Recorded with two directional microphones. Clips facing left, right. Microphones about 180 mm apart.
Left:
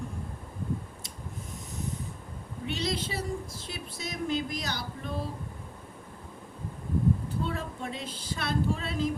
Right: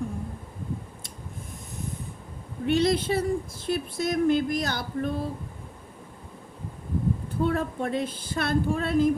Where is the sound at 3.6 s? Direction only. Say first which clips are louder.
Right 12 dB; 55° right (ahead or behind).